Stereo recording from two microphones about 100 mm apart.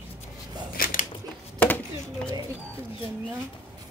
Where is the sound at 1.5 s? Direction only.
15° left (ahead or behind).